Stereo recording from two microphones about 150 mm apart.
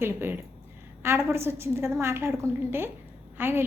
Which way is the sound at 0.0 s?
15° right (ahead or behind).